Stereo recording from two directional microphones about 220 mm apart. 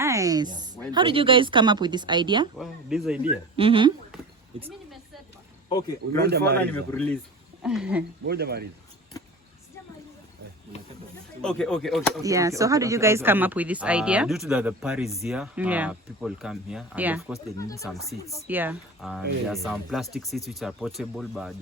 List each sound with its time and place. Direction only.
0.0 s a sound: 15° right (ahead or behind)
0.9 s speech: 20° right (ahead or behind)
2.6 s speech: centre (ahead or behind)
3.5 s speech: 25° right (ahead or behind)
5.6 s speech: 20° left (ahead or behind)
6.1 s speech: 45° right (ahead or behind)
6.6 s speech: 5° left (ahead or behind)
8.3 s speech: 45° right (ahead or behind)
11.4 s speech: 5° left (ahead or behind)
12.2 s speech: 15° right (ahead or behind)
17.6 s speech: 15° left (ahead or behind)
17.8 s speech: centre (ahead or behind)
18.2 s speech: 15° left (ahead or behind)
18.4 s speech: 10° right (ahead or behind)